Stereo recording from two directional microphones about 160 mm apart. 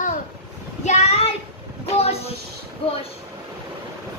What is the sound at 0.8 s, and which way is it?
Child singing, 40° left (ahead or behind).